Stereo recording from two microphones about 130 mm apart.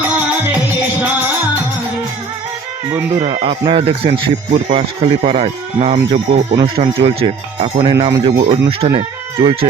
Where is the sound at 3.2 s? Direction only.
65° right (ahead or behind).